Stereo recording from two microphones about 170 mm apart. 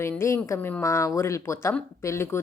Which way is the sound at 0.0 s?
15° left (ahead or behind).